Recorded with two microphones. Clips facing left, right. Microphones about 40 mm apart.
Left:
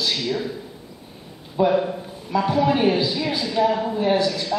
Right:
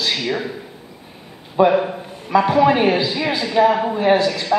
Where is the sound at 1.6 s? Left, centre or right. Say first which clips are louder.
Right 4 dB; right.